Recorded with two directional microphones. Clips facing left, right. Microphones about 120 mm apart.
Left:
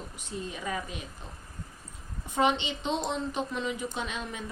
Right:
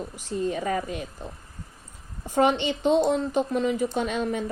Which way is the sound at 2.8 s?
45° right (ahead or behind).